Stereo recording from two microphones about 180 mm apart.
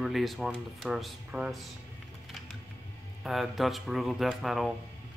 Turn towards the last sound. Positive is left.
turn(degrees=0)  # may be behind; listen again after turning